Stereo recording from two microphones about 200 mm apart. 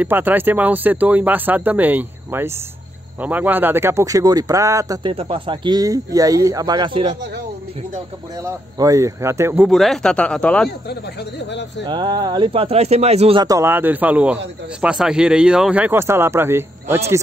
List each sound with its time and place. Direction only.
0.0 s speech: 10° right (ahead or behind); by 7.2 s 25° right (ahead or behind)
8.7 s speech: 15° right (ahead or behind)
9.7 s speech: centre (ahead or behind)
10.9 s speech: 60° left (ahead or behind)
11.8 s speech: 20° right (ahead or behind)
13.4 s speech: 15° right (ahead or behind)